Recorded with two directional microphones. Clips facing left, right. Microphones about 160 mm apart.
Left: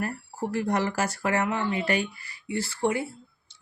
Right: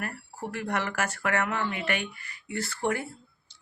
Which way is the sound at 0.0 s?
35° left (ahead or behind).